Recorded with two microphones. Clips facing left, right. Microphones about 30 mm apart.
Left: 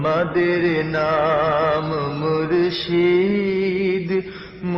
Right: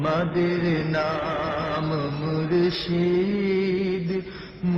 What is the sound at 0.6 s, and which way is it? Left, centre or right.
Music, centre.